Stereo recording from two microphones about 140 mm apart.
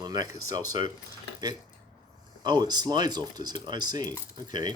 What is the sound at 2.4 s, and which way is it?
Speech, 30° right (ahead or behind).